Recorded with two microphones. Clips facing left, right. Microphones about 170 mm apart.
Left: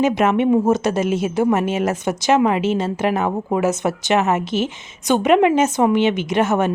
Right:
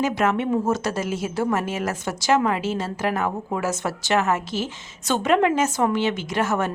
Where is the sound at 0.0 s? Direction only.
20° left (ahead or behind).